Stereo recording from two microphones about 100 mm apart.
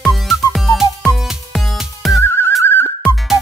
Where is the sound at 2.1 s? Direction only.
25° left (ahead or behind).